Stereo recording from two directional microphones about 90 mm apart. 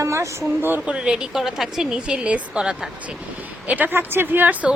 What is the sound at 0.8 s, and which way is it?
Speech, 10° right (ahead or behind).